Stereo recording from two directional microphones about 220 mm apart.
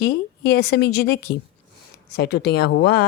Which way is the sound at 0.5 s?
45° left (ahead or behind).